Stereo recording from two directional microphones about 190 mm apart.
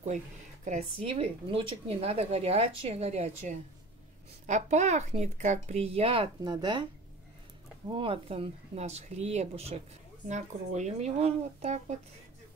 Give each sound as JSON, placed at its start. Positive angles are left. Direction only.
{"t": 1.0, "sound": "speech", "side_deg": -30}
{"t": 7.9, "sound": "speech", "side_deg": -30}